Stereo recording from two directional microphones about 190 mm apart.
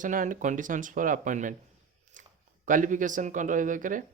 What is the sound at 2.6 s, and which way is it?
Speech, 45° right (ahead or behind).